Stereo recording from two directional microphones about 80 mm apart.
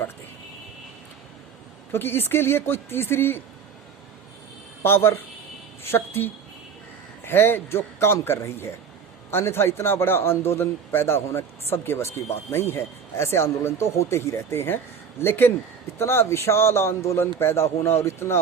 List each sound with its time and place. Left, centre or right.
1.9 s speech: left
4.8 s a man's voice: left